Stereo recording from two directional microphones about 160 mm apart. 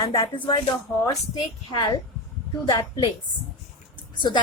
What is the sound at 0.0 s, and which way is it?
Speech, 25° left (ahead or behind).